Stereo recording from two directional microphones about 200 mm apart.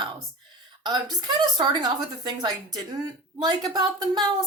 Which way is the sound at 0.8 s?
20° right (ahead or behind).